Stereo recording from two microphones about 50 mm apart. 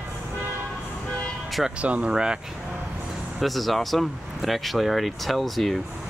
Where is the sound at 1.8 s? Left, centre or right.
Right.